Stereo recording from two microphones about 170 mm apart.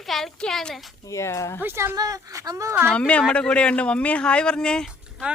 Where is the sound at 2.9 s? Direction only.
5° left (ahead or behind).